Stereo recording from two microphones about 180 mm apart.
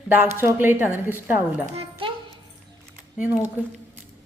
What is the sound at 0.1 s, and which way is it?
A woman's voice, 10° right (ahead or behind).